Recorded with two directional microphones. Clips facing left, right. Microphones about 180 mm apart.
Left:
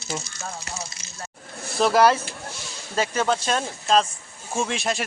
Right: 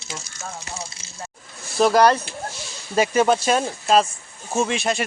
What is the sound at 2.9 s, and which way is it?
Speech, 15° right (ahead or behind).